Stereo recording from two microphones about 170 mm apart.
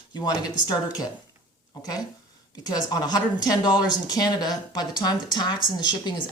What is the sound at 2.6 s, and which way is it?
Speech, 25° left (ahead or behind).